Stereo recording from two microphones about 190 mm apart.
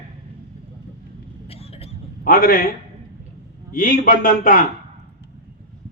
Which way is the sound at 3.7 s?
50° left (ahead or behind).